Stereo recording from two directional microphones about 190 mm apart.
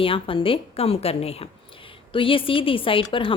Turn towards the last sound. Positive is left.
turn(degrees=25)  # may be behind; listen again after turning